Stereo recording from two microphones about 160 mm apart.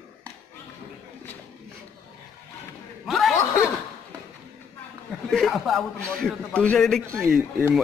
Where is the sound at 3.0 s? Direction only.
Centre (ahead or behind).